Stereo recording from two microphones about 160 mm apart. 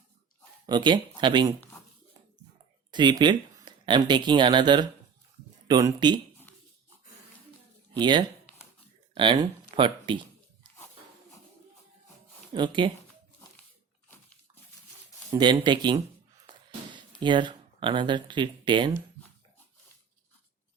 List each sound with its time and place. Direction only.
0.6 s speech: 30° right (ahead or behind)
2.9 s speech: 30° right (ahead or behind)
7.9 s speech: 30° right (ahead or behind)
12.5 s speech: 30° right (ahead or behind)
15.3 s speech: 25° right (ahead or behind)
17.2 s speech: 30° right (ahead or behind)